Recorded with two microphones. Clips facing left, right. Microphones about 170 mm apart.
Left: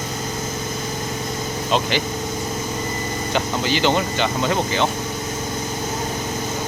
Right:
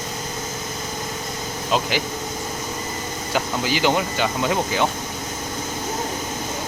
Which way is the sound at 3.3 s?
10° right (ahead or behind).